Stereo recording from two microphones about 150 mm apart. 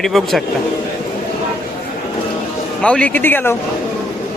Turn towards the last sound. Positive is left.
turn(degrees=15)  # may be behind; listen again after turning